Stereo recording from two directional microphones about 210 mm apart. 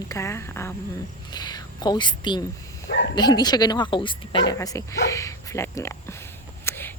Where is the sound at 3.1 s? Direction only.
20° left (ahead or behind).